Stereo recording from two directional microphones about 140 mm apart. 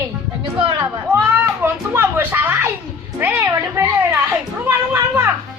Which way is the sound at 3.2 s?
20° right (ahead or behind).